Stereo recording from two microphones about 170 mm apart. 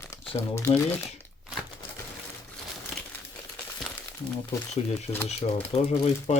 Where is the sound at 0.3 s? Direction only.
15° left (ahead or behind).